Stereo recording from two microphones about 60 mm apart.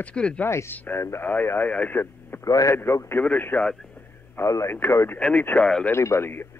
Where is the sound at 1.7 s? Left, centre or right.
Left.